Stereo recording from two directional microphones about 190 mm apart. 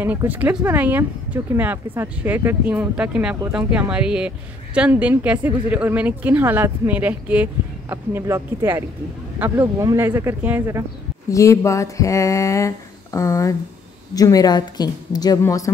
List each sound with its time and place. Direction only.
0.0 s speech: 10° right (ahead or behind)
11.2 s a woman's voice: 15° left (ahead or behind)